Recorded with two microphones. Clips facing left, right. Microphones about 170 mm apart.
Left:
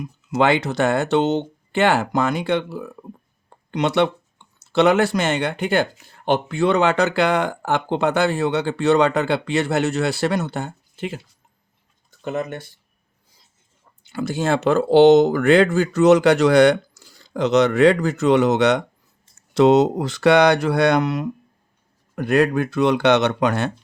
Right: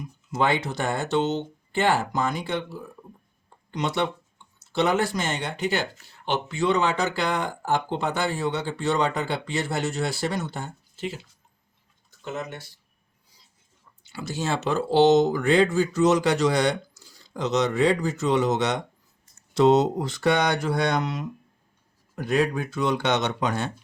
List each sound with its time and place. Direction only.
0.0 s speech: 80° left; by 11.2 s 60° left (ahead or behind)
12.2 s speech: 55° left (ahead or behind)
14.0 s speech: 55° left (ahead or behind)